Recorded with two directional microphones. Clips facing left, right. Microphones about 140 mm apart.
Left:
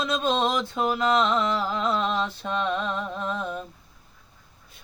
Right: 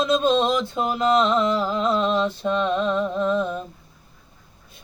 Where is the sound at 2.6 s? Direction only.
30° right (ahead or behind).